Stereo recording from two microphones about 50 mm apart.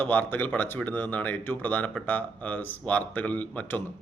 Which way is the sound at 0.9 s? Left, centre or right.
Left.